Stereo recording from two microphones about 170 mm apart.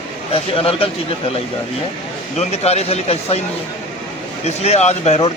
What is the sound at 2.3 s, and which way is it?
Speech, 40° left (ahead or behind).